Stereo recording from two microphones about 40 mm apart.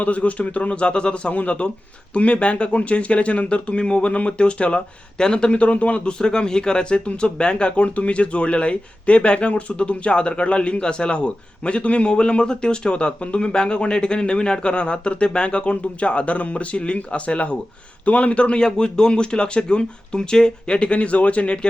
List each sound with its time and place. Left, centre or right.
0.0 s speech: left
1.3 s speech: left
6.1 s speech: centre